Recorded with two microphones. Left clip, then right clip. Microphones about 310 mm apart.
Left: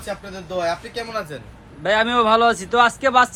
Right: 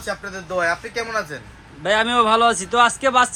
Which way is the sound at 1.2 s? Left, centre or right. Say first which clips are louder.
Right 2 dB; centre.